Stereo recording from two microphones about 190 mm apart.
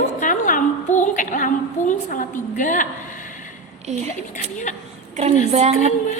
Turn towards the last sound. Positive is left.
turn(degrees=-35)  # may be behind; listen again after turning